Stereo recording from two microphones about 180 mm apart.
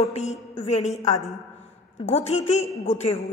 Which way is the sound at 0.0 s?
35° left (ahead or behind).